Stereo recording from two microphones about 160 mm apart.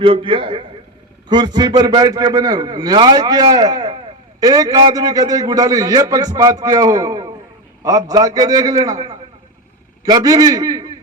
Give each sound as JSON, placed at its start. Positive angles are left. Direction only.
{"t": 0.0, "sound": "a man's voice", "side_deg": -35}